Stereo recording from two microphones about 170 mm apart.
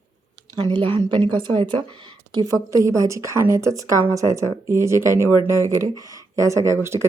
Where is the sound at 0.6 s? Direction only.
30° right (ahead or behind).